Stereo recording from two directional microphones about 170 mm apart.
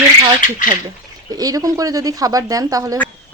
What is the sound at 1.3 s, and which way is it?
Speech, 20° right (ahead or behind).